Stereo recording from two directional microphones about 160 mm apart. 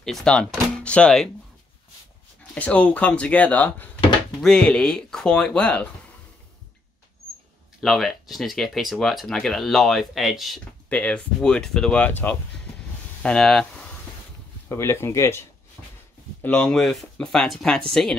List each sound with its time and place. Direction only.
0.0 s speech: 5° left (ahead or behind)
2.5 s speech: 10° left (ahead or behind)
7.8 s speech: centre (ahead or behind)
14.7 s speech: 15° left (ahead or behind)
16.4 s speech: 5° left (ahead or behind)